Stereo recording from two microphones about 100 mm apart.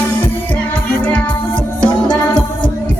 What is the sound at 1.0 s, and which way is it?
Music, 15° left (ahead or behind).